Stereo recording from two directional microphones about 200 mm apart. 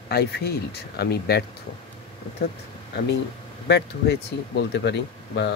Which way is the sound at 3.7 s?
55° left (ahead or behind).